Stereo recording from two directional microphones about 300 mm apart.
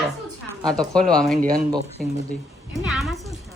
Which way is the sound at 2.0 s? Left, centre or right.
Centre.